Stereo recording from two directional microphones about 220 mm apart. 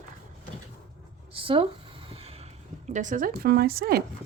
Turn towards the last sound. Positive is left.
turn(degrees=-45)  # may be behind; listen again after turning